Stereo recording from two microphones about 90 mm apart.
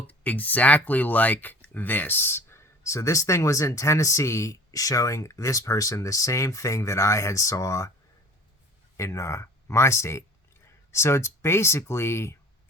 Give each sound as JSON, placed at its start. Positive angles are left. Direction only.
{"t": 0.1, "sound": "speech", "side_deg": 15}
{"t": 9.0, "sound": "speech", "side_deg": 35}